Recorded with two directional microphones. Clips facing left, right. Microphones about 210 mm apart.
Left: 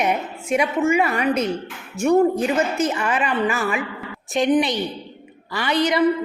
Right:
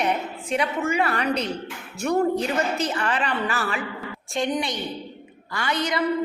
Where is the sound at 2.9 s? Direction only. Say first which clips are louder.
Left 3 dB; 10° left (ahead or behind).